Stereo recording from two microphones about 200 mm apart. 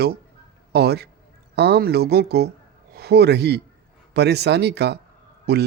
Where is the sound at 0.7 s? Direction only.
55° right (ahead or behind).